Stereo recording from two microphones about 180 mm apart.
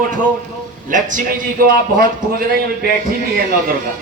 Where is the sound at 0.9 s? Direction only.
45° right (ahead or behind).